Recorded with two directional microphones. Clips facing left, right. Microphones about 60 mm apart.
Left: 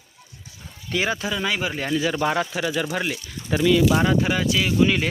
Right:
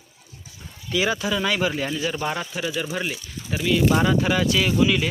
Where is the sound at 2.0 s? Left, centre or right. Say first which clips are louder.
Left 4 dB; left.